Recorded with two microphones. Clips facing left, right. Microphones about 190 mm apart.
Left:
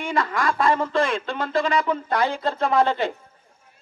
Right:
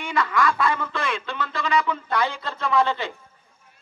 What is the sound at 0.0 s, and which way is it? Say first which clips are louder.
A man's voice: even; 45° left (ahead or behind).